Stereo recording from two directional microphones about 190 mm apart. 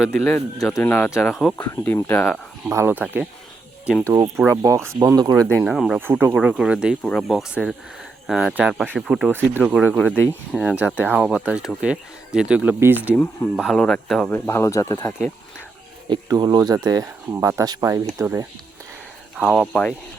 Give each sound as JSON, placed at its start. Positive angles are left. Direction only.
{"t": 0.1, "sound": "speech", "side_deg": 10}
{"t": 1.1, "sound": "speech", "side_deg": 0}
{"t": 1.6, "sound": "speech", "side_deg": 15}
{"t": 2.6, "sound": "speech", "side_deg": -15}
{"t": 5.6, "sound": "speech", "side_deg": 0}
{"t": 13.6, "sound": "speech", "side_deg": 0}
{"t": 14.3, "sound": "speech", "side_deg": 15}
{"t": 16.0, "sound": "speech", "side_deg": -25}
{"t": 19.4, "sound": "speech", "side_deg": 5}